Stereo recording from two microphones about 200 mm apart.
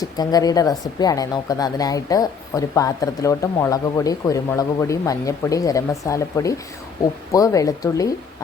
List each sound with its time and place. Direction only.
0.0 s speech: 20° left (ahead or behind)